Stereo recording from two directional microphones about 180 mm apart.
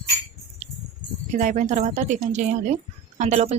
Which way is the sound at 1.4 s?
45° right (ahead or behind).